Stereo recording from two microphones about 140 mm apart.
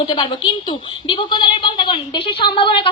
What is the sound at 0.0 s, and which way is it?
A woman's voice, 35° left (ahead or behind).